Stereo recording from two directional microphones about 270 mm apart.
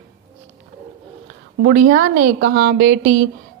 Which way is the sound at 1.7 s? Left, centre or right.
Right.